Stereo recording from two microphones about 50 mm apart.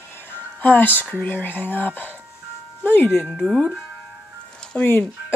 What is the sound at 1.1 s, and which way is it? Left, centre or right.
Speech, left.